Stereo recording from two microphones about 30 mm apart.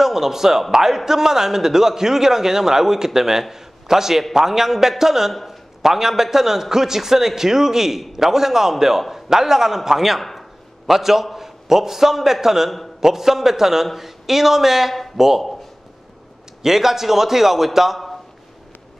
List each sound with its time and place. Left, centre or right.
0.0 s a man's voice: centre
16.6 s a man's voice: centre